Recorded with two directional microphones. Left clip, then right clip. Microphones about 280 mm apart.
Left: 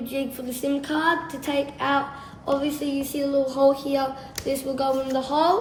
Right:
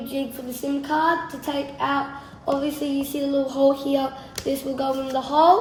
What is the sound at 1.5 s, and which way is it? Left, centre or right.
Speech, centre.